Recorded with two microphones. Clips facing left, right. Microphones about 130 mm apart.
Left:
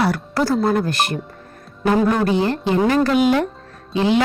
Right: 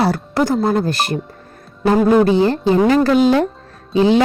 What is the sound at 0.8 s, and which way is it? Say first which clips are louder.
Speech: right 2 dB; 35° right (ahead or behind).